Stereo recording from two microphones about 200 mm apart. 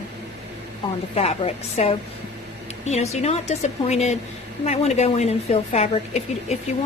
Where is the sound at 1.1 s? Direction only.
30° left (ahead or behind).